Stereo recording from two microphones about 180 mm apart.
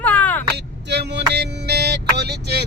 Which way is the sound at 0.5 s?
70° right (ahead or behind).